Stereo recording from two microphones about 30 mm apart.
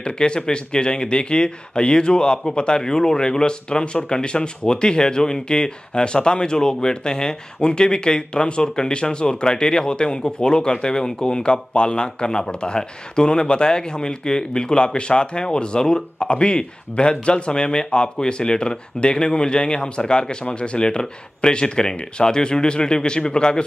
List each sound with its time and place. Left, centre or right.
0.0 s speech: left